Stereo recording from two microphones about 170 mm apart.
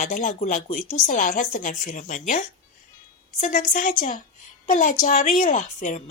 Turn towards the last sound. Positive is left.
turn(degrees=45)  # may be behind; listen again after turning